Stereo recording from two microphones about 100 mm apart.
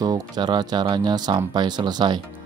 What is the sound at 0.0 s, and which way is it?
Speech, 45° right (ahead or behind).